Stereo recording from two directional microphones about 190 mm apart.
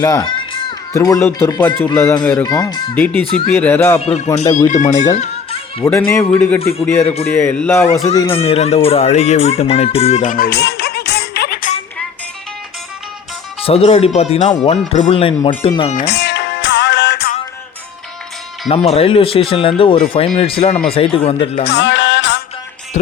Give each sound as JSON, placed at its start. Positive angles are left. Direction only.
{"t": 0.0, "sound": "speech", "side_deg": 20}
{"t": 2.9, "sound": "a man's voice", "side_deg": 10}
{"t": 4.0, "sound": "speech", "side_deg": 30}
{"t": 5.1, "sound": "music", "side_deg": 35}
{"t": 6.1, "sound": "a man's voice", "side_deg": 10}
{"t": 6.6, "sound": "speech", "side_deg": 30}
{"t": 7.3, "sound": "a man's voice", "side_deg": 10}
{"t": 8.0, "sound": "a man's voice", "side_deg": 15}
{"t": 8.3, "sound": "speech", "side_deg": 30}
{"t": 13.7, "sound": "speech", "side_deg": 30}
{"t": 16.0, "sound": "music", "side_deg": 60}
{"t": 18.7, "sound": "speech", "side_deg": 30}
{"t": 21.6, "sound": "music", "side_deg": 65}